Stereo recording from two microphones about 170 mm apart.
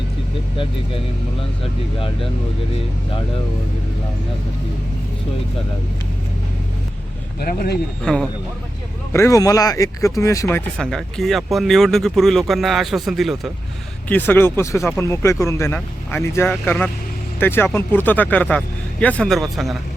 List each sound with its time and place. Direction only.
0.5 s speech: 30° left (ahead or behind)
7.3 s speech: 60° left (ahead or behind)
8.0 s speech: 5° left (ahead or behind)
9.1 s speech: 20° left (ahead or behind)
10.8 s speech: centre (ahead or behind)
14.1 s speech: 10° left (ahead or behind)